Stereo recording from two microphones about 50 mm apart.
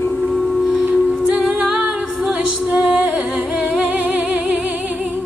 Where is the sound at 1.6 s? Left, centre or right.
Centre.